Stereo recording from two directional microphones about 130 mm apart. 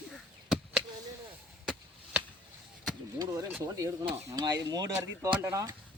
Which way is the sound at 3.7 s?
25° right (ahead or behind).